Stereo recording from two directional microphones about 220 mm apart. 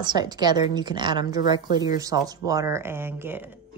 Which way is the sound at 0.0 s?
20° right (ahead or behind).